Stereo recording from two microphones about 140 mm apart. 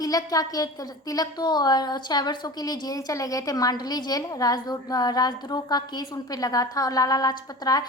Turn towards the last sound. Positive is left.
turn(degrees=25)  # may be behind; listen again after turning